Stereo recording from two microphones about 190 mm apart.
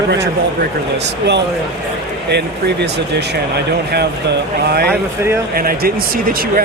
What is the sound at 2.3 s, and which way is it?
Speech, 60° right (ahead or behind).